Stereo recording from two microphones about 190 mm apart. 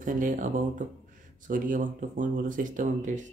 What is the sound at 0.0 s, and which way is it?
Speech, 45° right (ahead or behind).